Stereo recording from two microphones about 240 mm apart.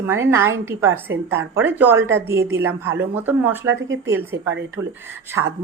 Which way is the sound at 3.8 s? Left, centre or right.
Right.